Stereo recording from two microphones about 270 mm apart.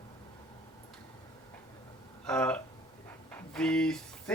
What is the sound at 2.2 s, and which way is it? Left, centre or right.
Speech, centre.